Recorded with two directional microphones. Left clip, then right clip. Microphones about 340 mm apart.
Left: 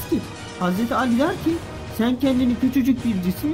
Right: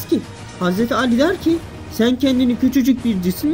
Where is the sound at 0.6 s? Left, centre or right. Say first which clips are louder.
Right 4 dB; centre.